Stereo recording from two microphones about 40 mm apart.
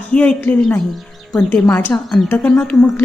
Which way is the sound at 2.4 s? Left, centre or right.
Left.